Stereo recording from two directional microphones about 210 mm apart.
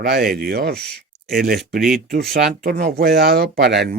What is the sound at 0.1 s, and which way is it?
Speech, 45° right (ahead or behind).